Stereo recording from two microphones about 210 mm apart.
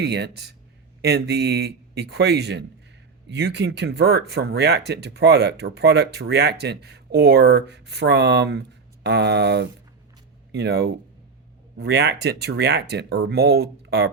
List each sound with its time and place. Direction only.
0.0 s speech: 55° right (ahead or behind)